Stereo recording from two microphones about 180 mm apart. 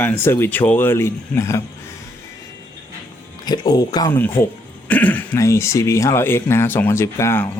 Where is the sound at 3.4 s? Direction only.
20° left (ahead or behind).